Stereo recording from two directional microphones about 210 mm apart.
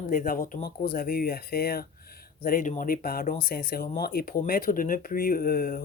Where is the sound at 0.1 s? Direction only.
40° left (ahead or behind).